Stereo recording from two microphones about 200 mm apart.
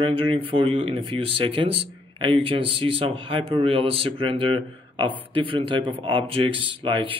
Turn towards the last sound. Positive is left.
turn(degrees=-25)  # may be behind; listen again after turning